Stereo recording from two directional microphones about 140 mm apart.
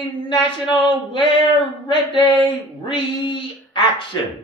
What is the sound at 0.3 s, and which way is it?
Speech, 35° left (ahead or behind).